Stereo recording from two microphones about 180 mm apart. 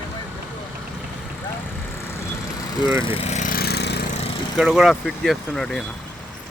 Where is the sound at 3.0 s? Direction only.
30° left (ahead or behind); by 4.0 s 65° left (ahead or behind).